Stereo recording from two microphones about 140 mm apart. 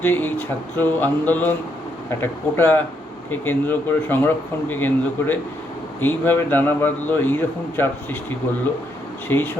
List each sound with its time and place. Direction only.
0.0 s a man's voice: 15° left (ahead or behind)
9.3 s a man's voice: 15° left (ahead or behind)